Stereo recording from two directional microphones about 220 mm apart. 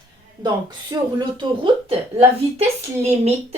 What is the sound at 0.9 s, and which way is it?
A woman's voice, 20° right (ahead or behind).